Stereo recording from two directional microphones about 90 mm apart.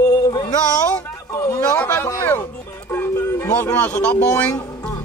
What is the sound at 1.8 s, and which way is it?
Speech, 25° left (ahead or behind).